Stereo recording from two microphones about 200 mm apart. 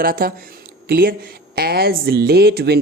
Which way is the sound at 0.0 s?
45° right (ahead or behind).